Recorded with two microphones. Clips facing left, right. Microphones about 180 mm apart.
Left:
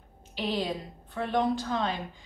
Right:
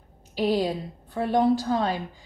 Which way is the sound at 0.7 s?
40° right (ahead or behind).